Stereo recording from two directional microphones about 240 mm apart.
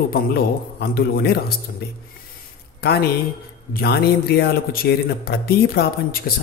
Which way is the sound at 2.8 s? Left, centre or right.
Left.